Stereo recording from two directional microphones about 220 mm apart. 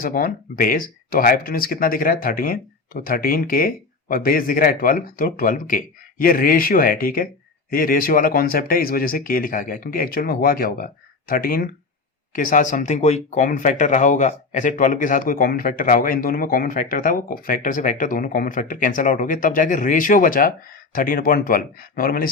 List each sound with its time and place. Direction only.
0.0 s speech: 40° left (ahead or behind)